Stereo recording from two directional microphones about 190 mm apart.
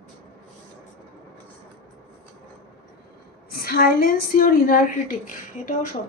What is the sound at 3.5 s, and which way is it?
A woman's voice, 50° left (ahead or behind).